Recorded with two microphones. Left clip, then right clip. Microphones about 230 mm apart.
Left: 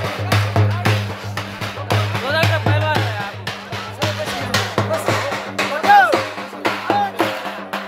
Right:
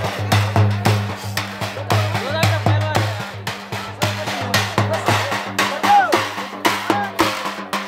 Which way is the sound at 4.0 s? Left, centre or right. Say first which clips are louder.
Even; right.